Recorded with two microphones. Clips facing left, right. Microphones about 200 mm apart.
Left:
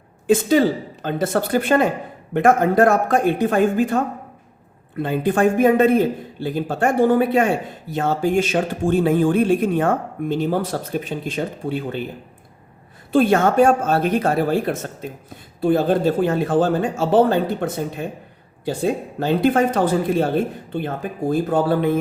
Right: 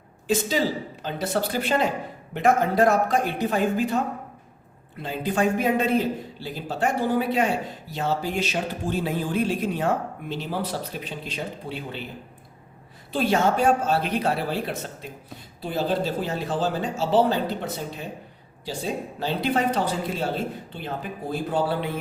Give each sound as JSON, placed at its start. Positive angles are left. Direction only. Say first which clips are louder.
{"t": 0.3, "sound": "speech", "louder": "left 8 dB", "side_deg": 55}
{"t": 13.1, "sound": "speech", "louder": "left 7 dB", "side_deg": 55}